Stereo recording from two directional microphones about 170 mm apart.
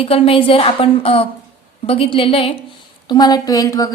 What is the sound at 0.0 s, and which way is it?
A woman's voice, 35° left (ahead or behind).